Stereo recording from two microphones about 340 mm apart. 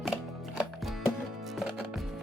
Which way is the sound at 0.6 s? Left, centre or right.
Centre.